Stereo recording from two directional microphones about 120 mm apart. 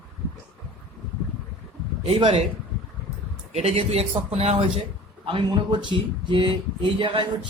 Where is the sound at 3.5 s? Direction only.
60° right (ahead or behind).